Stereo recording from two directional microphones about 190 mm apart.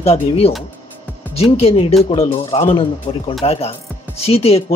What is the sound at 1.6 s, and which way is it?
Speech, 30° left (ahead or behind).